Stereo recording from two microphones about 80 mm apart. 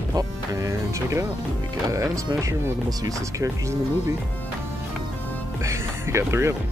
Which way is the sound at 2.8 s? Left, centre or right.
Right.